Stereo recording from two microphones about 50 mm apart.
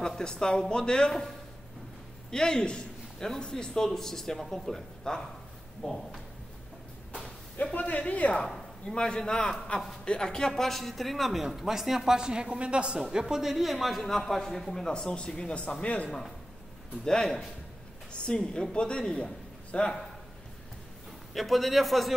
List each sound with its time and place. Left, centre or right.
0.0 s a man's voice: centre
2.3 s a man's voice: centre
7.7 s speech: left
8.8 s a man's voice: centre
17.0 s a man's voice: centre
21.3 s speech: centre